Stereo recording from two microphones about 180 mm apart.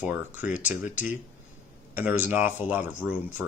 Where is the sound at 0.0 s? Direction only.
10° right (ahead or behind).